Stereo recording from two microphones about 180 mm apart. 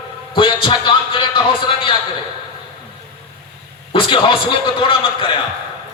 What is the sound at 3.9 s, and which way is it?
A man's voice, 30° left (ahead or behind).